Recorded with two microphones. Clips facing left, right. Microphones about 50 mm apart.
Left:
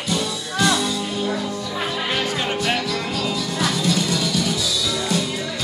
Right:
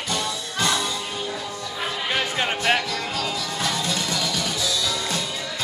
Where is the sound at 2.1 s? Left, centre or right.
Right.